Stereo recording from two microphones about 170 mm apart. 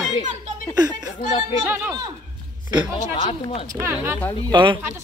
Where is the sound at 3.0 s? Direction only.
35° left (ahead or behind).